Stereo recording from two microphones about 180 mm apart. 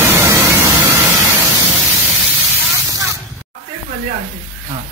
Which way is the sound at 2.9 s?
20° right (ahead or behind).